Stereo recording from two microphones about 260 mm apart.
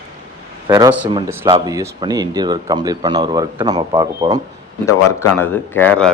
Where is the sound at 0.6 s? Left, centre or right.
Centre.